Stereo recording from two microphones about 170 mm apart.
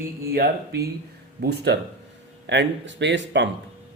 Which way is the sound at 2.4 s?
90° right.